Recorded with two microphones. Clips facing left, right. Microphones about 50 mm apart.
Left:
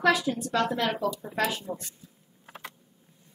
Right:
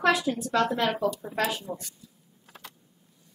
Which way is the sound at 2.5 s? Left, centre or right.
Left.